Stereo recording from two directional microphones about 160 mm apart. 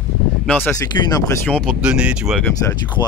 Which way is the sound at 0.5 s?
10° left (ahead or behind).